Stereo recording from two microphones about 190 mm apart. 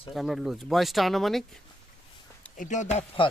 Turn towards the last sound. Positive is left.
turn(degrees=35)  # may be behind; listen again after turning